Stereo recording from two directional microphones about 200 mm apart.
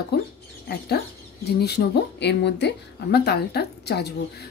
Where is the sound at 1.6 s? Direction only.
55° left (ahead or behind).